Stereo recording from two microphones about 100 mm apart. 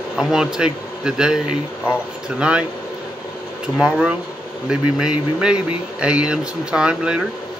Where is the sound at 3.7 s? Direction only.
5° right (ahead or behind).